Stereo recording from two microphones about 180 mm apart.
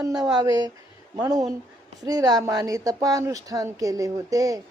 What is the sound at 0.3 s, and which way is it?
Speech, 20° right (ahead or behind).